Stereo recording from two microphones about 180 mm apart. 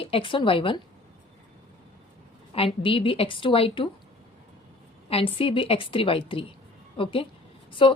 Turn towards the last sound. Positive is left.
turn(degrees=30)  # may be behind; listen again after turning